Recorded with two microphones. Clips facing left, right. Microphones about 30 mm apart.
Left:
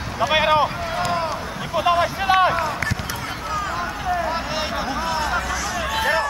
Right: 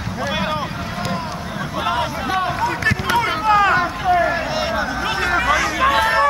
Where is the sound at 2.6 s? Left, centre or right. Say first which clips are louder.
Right 5 dB; right.